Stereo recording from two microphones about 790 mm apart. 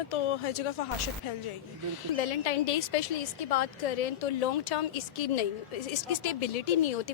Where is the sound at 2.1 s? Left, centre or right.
Left.